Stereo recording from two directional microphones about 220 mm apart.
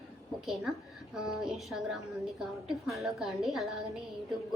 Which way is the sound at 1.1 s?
Centre (ahead or behind).